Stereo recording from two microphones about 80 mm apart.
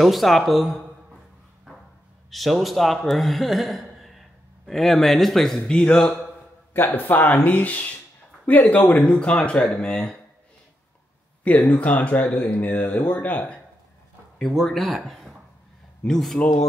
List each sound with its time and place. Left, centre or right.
0.0 s speech: centre
2.3 s speech: centre
6.7 s speech: left
11.7 s speech: centre
14.4 s speech: centre